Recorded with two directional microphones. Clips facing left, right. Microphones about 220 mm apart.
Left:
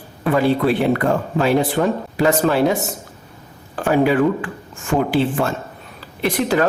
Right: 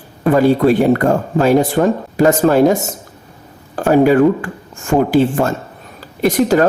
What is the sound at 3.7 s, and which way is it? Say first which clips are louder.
Speech: right 5 dB; 40° right (ahead or behind).